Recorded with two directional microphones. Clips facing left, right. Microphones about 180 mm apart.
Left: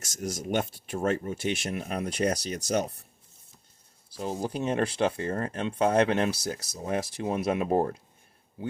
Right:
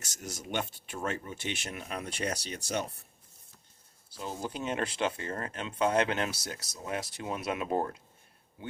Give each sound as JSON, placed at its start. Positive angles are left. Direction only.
{"t": 0.2, "sound": "speech", "side_deg": 40}
{"t": 4.2, "sound": "speech", "side_deg": 35}